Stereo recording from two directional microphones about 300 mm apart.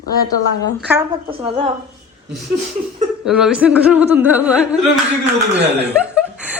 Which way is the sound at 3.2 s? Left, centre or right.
Centre.